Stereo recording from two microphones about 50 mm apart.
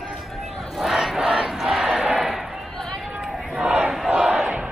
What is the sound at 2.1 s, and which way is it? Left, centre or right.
Crowd, centre.